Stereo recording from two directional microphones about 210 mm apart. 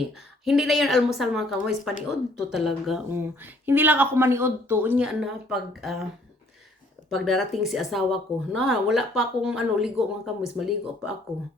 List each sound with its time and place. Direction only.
0.1 s speech: centre (ahead or behind)
3.1 s speech: 10° right (ahead or behind)
7.1 s speech: centre (ahead or behind)